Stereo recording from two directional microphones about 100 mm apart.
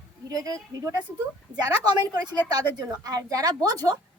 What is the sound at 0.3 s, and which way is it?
A woman's voice, 35° right (ahead or behind).